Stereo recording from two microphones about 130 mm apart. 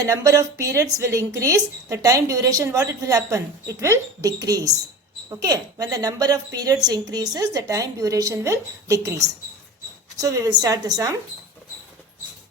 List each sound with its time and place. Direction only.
0.0 s speech: 25° right (ahead or behind)